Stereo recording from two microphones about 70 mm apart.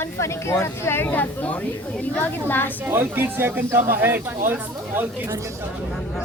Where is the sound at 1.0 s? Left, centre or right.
Left.